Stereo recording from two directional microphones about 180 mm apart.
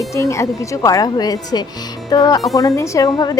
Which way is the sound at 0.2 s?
15° left (ahead or behind).